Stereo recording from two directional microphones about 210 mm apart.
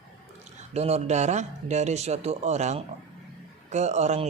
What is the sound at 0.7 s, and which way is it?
Speech, 30° right (ahead or behind).